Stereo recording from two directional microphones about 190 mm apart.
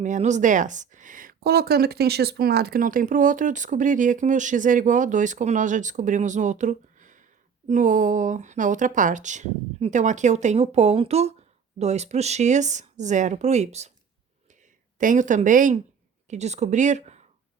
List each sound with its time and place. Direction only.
0.0 s speech: 40° right (ahead or behind)
14.9 s speech: 45° right (ahead or behind)